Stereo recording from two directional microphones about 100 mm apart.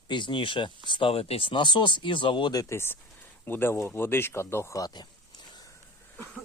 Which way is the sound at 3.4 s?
20° left (ahead or behind).